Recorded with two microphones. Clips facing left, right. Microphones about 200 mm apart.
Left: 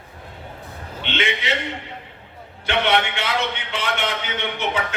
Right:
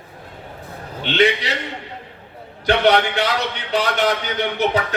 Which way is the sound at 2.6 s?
40° right (ahead or behind).